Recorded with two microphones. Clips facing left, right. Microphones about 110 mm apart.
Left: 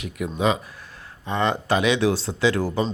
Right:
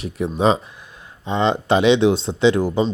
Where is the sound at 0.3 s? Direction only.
30° right (ahead or behind).